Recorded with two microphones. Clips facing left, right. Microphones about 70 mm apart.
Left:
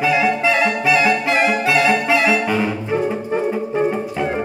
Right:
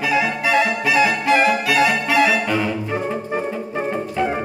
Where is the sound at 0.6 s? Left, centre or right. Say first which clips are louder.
Left 1 dB; left.